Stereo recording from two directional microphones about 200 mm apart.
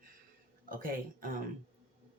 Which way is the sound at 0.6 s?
45° right (ahead or behind).